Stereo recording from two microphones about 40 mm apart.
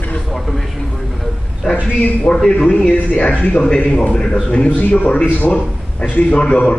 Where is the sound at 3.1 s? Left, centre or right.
Left.